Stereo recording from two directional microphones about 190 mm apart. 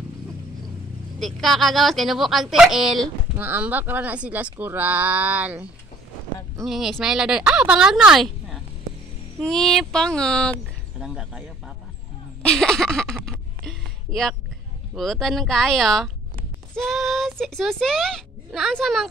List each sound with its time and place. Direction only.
1.2 s speech: centre (ahead or behind)
12.4 s a sound: 5° left (ahead or behind)
15.0 s speech: centre (ahead or behind)